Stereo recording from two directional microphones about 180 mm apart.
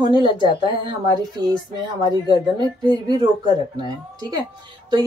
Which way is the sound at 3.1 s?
25° right (ahead or behind).